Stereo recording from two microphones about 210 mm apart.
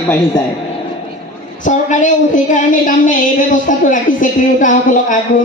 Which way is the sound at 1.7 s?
35° left (ahead or behind).